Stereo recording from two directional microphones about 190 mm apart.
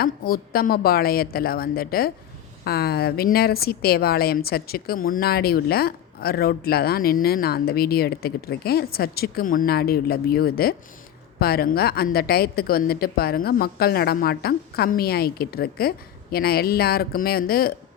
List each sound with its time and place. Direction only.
0.0 s a woman's voice: 50° left (ahead or behind)